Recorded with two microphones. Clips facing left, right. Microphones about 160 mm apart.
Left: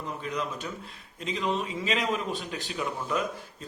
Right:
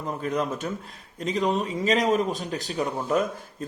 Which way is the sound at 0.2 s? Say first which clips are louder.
Right 7 dB; 50° right (ahead or behind).